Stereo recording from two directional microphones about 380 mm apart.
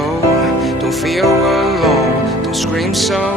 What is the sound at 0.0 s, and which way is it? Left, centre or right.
Music, centre.